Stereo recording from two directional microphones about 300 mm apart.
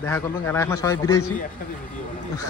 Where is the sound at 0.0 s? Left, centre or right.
Centre.